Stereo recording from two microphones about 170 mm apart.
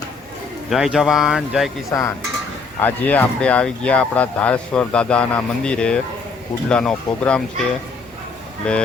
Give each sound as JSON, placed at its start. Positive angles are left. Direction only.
{"t": 0.7, "sound": "speech", "side_deg": 0}
{"t": 1.9, "sound": "dishes", "side_deg": 20}
{"t": 2.8, "sound": "speech", "side_deg": 10}
{"t": 8.7, "sound": "speech", "side_deg": 5}